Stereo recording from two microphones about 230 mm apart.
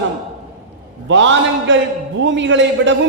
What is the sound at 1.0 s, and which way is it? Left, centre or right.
A man's voice, right.